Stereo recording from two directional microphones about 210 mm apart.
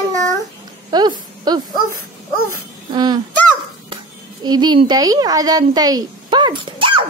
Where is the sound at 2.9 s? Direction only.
20° right (ahead or behind).